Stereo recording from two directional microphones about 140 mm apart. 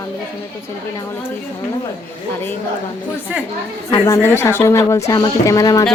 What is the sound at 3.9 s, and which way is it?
Speech, 20° left (ahead or behind).